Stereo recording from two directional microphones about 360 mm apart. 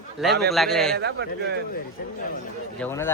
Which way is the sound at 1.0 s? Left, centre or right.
Right.